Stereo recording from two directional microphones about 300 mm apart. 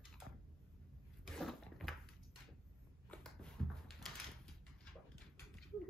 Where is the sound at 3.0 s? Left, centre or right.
Centre.